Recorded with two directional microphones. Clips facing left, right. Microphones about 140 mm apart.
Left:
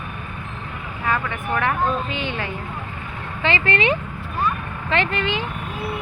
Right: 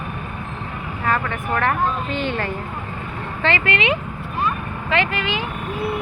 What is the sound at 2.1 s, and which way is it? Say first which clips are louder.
Speech: right 4 dB; 40° right (ahead or behind).